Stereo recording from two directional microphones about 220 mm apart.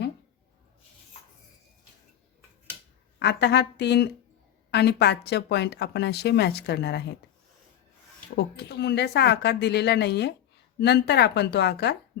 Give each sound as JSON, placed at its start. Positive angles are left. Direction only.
{"t": 3.2, "sound": "speech", "side_deg": 50}
{"t": 8.4, "sound": "speech", "side_deg": 50}